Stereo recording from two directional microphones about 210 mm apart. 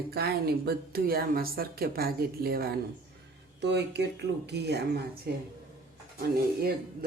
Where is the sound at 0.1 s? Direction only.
50° right (ahead or behind).